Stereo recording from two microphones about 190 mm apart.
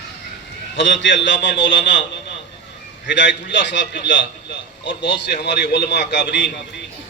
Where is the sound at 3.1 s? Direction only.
70° left (ahead or behind).